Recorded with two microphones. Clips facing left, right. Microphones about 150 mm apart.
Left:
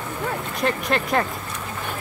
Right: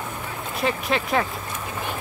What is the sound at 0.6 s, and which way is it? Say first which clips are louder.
Speech: even; centre (ahead or behind).